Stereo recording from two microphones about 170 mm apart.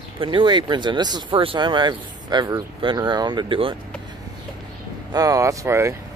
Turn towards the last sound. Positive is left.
turn(degrees=-15)  # may be behind; listen again after turning